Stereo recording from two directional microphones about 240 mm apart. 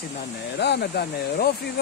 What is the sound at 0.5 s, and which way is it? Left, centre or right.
Speech, left.